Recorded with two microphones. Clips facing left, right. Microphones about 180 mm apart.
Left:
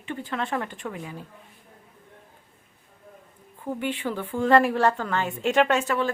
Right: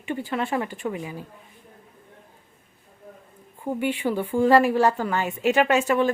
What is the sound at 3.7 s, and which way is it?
A woman's voice, 10° right (ahead or behind).